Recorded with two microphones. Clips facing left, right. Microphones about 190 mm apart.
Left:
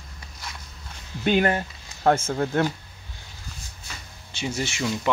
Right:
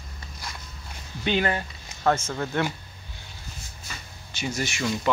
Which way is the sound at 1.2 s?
50° left (ahead or behind).